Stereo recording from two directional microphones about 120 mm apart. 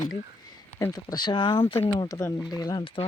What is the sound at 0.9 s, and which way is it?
Speech, 35° left (ahead or behind).